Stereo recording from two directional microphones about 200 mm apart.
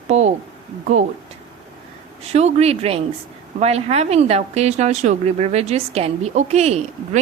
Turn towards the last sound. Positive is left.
turn(degrees=-35)  # may be behind; listen again after turning